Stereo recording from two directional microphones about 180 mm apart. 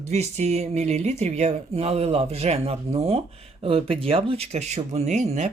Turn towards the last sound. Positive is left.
turn(degrees=-40)  # may be behind; listen again after turning